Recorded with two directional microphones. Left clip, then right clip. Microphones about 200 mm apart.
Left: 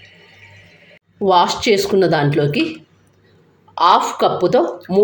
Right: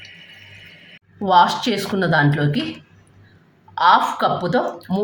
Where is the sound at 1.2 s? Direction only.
15° left (ahead or behind).